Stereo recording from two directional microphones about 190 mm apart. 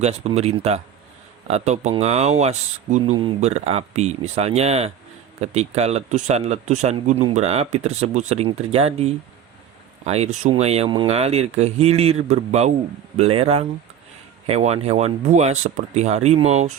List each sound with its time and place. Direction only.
0.0 s speech: 35° right (ahead or behind)